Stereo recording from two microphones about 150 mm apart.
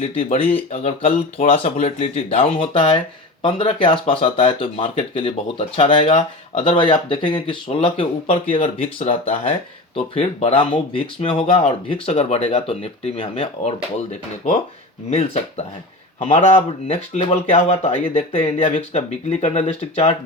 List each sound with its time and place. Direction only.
0.0 s speech: 40° left (ahead or behind)